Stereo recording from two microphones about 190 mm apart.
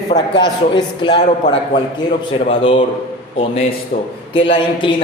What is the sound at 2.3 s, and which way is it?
A man's voice, 30° left (ahead or behind).